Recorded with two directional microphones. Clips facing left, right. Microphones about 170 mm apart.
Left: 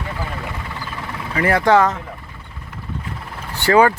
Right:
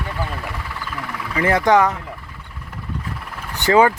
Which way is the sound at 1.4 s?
20° right (ahead or behind).